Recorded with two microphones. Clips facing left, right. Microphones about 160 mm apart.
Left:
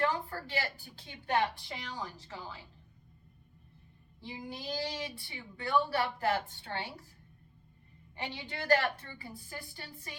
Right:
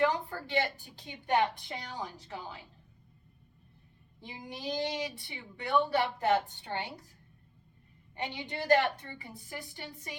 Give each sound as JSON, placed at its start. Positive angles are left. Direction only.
{"t": 0.0, "sound": "a woman's voice", "side_deg": -20}
{"t": 4.2, "sound": "a woman's voice", "side_deg": -20}
{"t": 8.1, "sound": "a woman's voice", "side_deg": -15}